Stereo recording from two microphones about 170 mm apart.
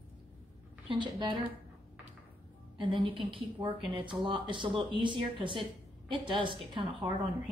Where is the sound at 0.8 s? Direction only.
30° right (ahead or behind).